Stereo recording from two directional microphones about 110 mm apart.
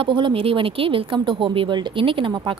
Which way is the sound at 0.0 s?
50° right (ahead or behind).